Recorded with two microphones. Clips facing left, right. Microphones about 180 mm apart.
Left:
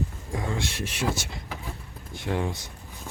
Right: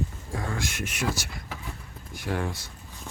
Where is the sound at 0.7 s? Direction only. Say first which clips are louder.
Left 1 dB; 35° left (ahead or behind).